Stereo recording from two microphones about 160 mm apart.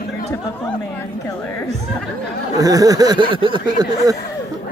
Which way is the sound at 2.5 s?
25° right (ahead or behind).